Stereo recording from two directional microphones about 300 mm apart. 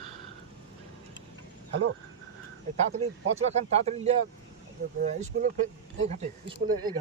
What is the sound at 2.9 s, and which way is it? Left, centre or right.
Speech, right.